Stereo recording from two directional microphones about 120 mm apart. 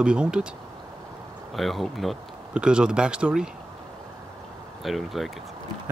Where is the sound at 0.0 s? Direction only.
10° right (ahead or behind).